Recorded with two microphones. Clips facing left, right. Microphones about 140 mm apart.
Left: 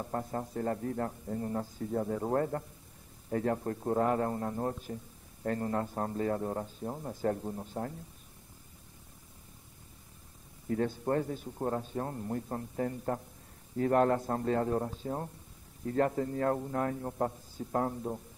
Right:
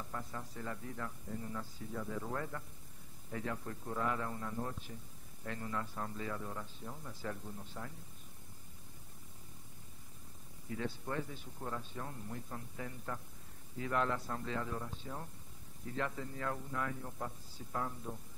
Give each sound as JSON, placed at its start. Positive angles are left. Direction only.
{"t": 0.0, "sound": "a man's voice", "side_deg": 45}
{"t": 10.7, "sound": "a man's voice", "side_deg": 45}